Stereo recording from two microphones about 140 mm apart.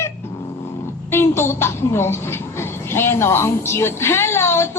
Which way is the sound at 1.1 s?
15° left (ahead or behind).